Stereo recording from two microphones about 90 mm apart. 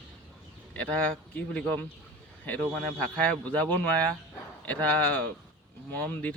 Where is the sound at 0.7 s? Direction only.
15° left (ahead or behind).